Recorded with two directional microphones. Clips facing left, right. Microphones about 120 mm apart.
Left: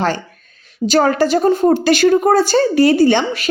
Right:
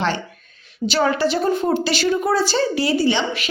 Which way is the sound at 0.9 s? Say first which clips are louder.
Left 5 dB; 45° left (ahead or behind).